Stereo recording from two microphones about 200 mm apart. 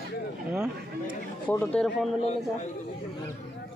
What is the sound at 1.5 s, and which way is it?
Speech, 5° left (ahead or behind).